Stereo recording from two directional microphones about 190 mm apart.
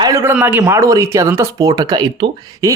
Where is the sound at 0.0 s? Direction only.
15° right (ahead or behind).